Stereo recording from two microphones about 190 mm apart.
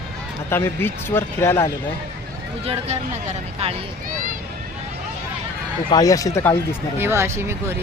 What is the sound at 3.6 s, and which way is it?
Speech, 35° right (ahead or behind).